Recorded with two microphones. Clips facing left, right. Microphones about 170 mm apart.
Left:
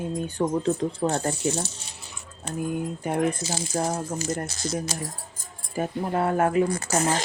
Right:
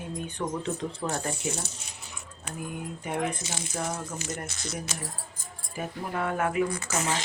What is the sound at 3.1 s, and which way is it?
Speech, 35° left (ahead or behind).